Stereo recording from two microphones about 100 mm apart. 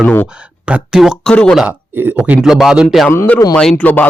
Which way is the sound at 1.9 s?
20° right (ahead or behind).